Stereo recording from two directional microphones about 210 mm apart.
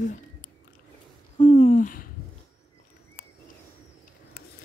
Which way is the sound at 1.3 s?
30° left (ahead or behind).